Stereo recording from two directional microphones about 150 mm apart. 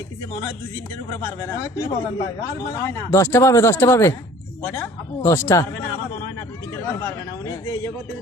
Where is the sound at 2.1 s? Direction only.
20° left (ahead or behind).